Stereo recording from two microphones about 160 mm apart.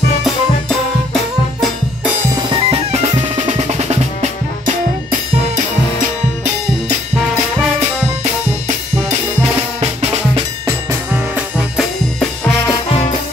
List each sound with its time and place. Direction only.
2.5 s drum kit: 30° right (ahead or behind)
3.3 s percussion: 45° right (ahead or behind)
8.2 s music: 45° right (ahead or behind)
10.9 s music: 5° right (ahead or behind)